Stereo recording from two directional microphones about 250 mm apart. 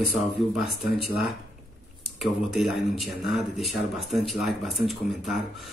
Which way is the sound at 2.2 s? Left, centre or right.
Centre.